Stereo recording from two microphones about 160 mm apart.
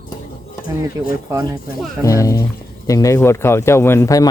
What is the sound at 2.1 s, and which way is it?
Speech, 20° left (ahead or behind).